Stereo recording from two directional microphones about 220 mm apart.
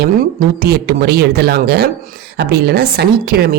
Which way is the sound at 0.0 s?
45° right (ahead or behind).